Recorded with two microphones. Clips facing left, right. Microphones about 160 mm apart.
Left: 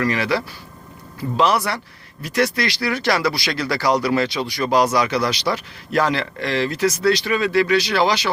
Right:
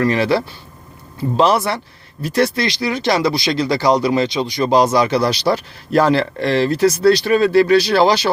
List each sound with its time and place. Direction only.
0.0 s speech: 30° right (ahead or behind)